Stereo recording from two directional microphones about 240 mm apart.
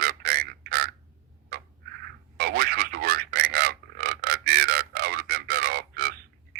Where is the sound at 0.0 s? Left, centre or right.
Right.